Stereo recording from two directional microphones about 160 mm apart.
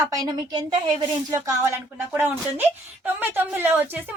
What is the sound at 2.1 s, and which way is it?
A woman's voice, 10° right (ahead or behind).